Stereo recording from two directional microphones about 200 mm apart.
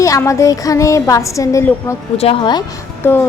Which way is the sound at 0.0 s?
15° left (ahead or behind).